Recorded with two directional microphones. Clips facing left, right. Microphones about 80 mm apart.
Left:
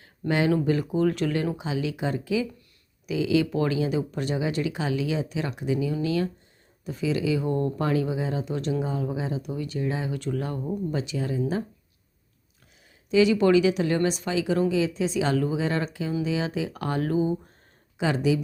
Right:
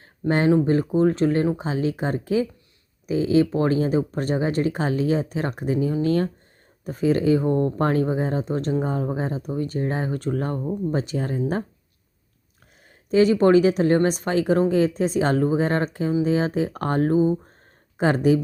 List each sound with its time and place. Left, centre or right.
0.0 s a sound: right
0.5 s speech: right
7.8 s speech: right
13.1 s speech: right
17.9 s speech: right